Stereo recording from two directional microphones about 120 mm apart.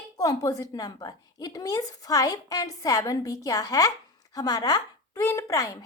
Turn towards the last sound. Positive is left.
turn(degrees=30)  # may be behind; listen again after turning